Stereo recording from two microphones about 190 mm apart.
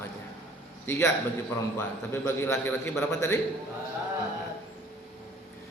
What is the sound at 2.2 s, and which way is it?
A man's voice, 15° left (ahead or behind).